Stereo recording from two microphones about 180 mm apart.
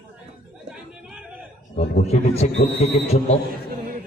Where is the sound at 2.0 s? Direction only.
35° left (ahead or behind).